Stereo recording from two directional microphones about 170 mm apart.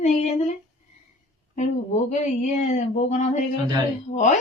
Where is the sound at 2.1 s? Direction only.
45° left (ahead or behind).